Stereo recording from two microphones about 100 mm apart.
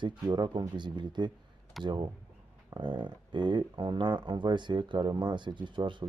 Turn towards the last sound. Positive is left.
turn(degrees=-50)  # may be behind; listen again after turning